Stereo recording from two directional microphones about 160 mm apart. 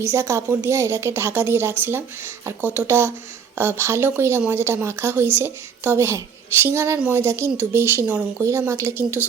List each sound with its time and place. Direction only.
0.0 s speech: 15° right (ahead or behind)